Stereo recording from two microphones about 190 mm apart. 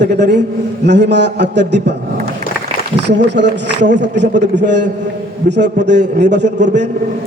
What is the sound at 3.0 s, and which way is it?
A man's voice, 65° right (ahead or behind).